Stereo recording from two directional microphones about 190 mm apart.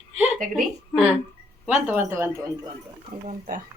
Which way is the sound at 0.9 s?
15° left (ahead or behind).